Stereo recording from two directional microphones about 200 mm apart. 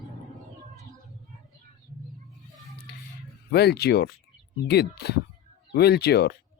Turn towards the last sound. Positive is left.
turn(degrees=55)  # may be behind; listen again after turning